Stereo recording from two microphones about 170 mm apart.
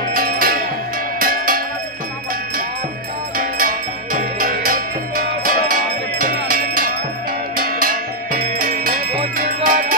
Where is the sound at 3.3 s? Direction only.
55° right (ahead or behind).